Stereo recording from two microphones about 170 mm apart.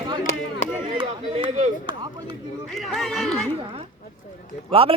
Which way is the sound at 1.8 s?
25° right (ahead or behind).